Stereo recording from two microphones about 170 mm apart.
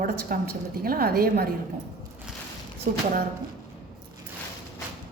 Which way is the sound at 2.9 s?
40° right (ahead or behind).